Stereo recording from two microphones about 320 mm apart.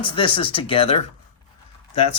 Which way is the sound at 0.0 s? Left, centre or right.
Centre.